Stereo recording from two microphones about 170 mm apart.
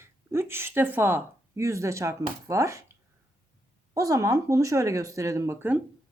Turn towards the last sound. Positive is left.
turn(degrees=-10)  # may be behind; listen again after turning